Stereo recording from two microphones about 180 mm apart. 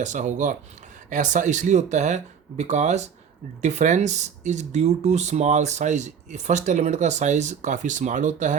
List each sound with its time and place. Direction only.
0.0 s speech: 40° right (ahead or behind)